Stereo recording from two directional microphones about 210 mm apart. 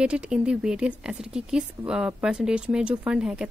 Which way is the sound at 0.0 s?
5° right (ahead or behind).